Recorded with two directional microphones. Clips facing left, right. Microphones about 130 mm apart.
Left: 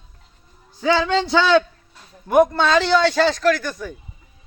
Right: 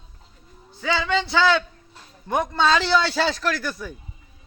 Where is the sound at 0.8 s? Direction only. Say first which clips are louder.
Left 5 dB; 20° left (ahead or behind).